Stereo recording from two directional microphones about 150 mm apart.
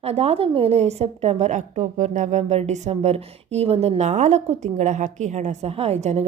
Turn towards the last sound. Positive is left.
turn(degrees=-50)  # may be behind; listen again after turning